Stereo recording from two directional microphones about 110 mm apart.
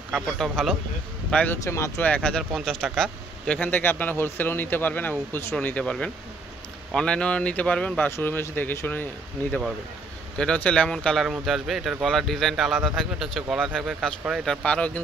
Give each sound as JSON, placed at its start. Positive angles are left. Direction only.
{"t": 0.1, "sound": "speech", "side_deg": 5}
{"t": 1.3, "sound": "speech", "side_deg": 15}
{"t": 1.6, "sound": "speech", "side_deg": 25}
{"t": 2.0, "sound": "speech", "side_deg": 10}
{"t": 3.5, "sound": "speech", "side_deg": 15}